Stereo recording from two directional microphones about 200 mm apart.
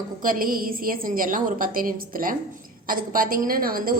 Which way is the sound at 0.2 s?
45° right (ahead or behind).